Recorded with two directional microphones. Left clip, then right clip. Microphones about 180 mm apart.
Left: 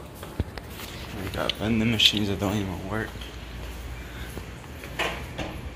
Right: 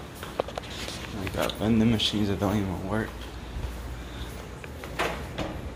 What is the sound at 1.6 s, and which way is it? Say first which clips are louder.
Speech: left 3 dB; 15° right (ahead or behind).